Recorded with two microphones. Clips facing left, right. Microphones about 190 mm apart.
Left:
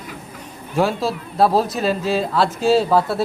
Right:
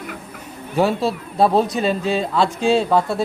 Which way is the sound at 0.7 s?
Centre (ahead or behind).